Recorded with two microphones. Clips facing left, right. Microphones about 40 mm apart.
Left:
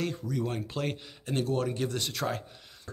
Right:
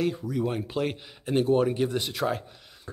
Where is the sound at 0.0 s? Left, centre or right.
Centre.